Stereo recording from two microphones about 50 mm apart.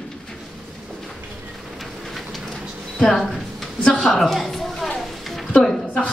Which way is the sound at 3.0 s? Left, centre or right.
Centre.